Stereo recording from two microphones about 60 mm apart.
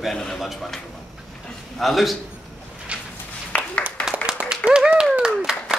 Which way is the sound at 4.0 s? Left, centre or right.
Centre.